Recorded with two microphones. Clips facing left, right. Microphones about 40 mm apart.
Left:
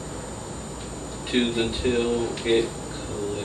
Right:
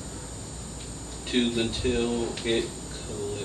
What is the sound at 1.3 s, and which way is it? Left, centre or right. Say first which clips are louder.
Speech: left 2 dB; centre.